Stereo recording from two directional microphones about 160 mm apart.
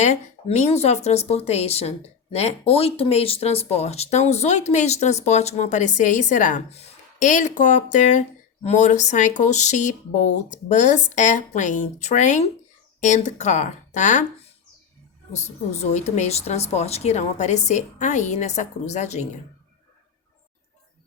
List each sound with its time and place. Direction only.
0.0 s speech: 45° left (ahead or behind)
15.3 s speech: 45° left (ahead or behind)